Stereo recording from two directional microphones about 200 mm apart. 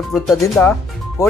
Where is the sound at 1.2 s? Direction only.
15° left (ahead or behind).